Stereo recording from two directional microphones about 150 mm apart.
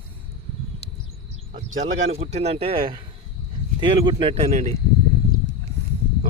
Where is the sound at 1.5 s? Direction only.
60° right (ahead or behind).